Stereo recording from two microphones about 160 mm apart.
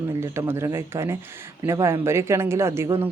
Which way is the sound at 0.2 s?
15° right (ahead or behind).